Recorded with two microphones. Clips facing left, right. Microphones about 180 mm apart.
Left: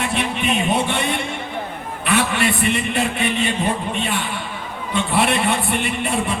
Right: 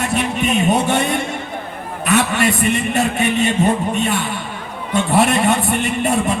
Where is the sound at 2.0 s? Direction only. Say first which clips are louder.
Right 3 dB; 40° right (ahead or behind).